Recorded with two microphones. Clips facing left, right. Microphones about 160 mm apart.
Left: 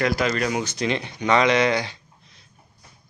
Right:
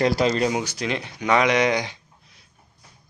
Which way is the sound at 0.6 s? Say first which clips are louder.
Left 2 dB; 5° right (ahead or behind).